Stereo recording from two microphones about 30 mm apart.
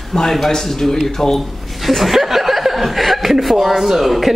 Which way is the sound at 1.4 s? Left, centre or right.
Centre.